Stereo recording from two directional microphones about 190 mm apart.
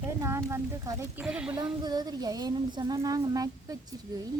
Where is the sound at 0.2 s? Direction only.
15° right (ahead or behind).